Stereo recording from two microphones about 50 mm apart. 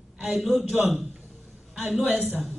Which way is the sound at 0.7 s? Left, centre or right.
Right.